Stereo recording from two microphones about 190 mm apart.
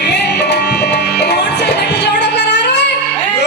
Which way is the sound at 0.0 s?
65° left (ahead or behind).